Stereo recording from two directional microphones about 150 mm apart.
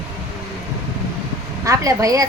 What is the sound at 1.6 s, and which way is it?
Speech, 20° right (ahead or behind).